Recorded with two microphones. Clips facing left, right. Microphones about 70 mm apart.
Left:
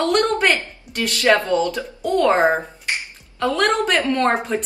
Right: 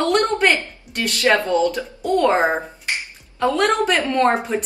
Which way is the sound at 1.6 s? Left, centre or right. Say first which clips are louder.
Right 1 dB; centre.